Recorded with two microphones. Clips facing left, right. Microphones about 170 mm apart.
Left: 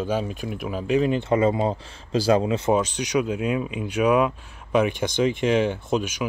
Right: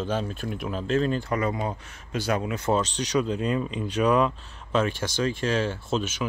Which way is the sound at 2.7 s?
10° left (ahead or behind).